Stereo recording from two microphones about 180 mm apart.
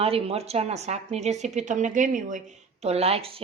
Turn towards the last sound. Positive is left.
turn(degrees=-30)  # may be behind; listen again after turning